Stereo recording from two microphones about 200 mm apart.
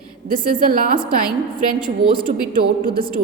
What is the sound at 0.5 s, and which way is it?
Speech, 45° right (ahead or behind).